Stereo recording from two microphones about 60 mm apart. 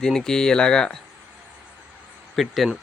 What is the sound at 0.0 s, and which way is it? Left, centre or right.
Speech, centre.